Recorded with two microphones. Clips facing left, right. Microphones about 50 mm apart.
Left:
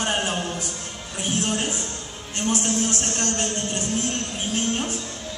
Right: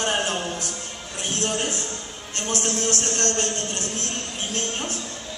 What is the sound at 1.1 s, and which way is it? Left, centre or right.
Speech, centre.